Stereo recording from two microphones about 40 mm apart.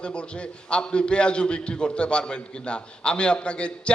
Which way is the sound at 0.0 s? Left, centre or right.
Left.